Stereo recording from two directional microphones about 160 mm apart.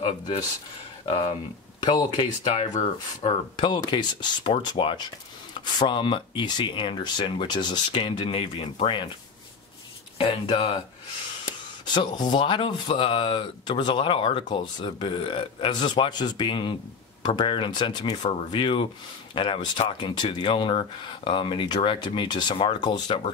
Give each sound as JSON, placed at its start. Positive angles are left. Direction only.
{"t": 1.0, "sound": "speech", "side_deg": 35}
{"t": 2.7, "sound": "speech", "side_deg": 45}
{"t": 3.5, "sound": "speech", "side_deg": 30}
{"t": 10.1, "sound": "speech", "side_deg": 30}